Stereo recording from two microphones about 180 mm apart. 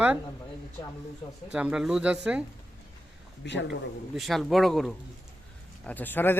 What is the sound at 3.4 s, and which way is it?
Speech, 75° left (ahead or behind).